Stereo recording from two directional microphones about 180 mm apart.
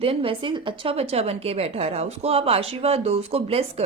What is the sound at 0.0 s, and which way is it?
A woman's voice, 30° right (ahead or behind).